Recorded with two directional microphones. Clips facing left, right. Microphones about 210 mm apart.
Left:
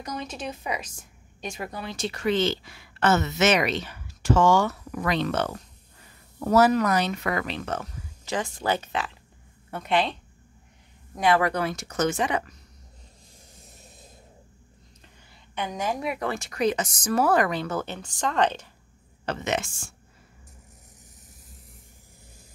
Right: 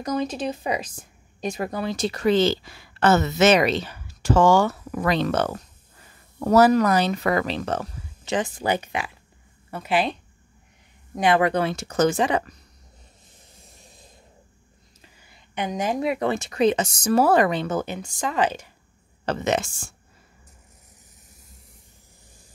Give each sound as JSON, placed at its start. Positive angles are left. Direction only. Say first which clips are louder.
{"t": 0.0, "sound": "a woman's voice", "louder": "right 8 dB", "side_deg": -35}
{"t": 8.4, "sound": "a woman's voice", "louder": "right 3 dB", "side_deg": -15}
{"t": 11.1, "sound": "a woman's voice", "louder": "right 3 dB", "side_deg": -20}
{"t": 15.5, "sound": "speech", "louder": "right 4 dB", "side_deg": -20}
{"t": 19.2, "sound": "a woman's voice", "louder": "right 4 dB", "side_deg": -35}